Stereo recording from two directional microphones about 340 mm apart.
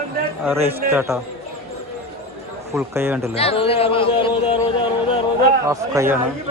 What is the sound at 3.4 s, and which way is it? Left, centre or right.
Speech, centre.